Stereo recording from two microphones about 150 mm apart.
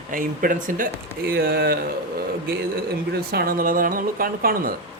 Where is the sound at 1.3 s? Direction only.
90° right.